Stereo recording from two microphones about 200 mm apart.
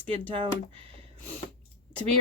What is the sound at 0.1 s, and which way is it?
Speech, 25° right (ahead or behind).